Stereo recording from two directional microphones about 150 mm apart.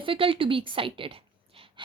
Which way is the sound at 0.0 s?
35° right (ahead or behind).